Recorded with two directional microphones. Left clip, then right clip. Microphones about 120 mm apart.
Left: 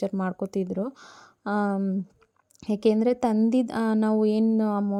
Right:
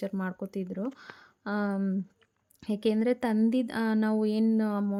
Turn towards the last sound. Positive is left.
turn(degrees=20)  # may be behind; listen again after turning